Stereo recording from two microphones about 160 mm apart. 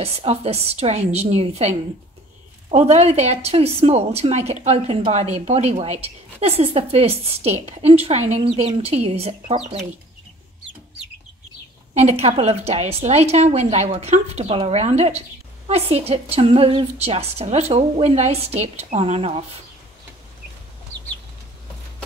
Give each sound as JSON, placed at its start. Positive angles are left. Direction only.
{"t": 0.0, "sound": "a woman's voice", "side_deg": -40}
{"t": 11.9, "sound": "a woman's voice", "side_deg": -45}